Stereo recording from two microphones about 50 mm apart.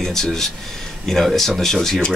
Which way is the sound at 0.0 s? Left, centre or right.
Centre.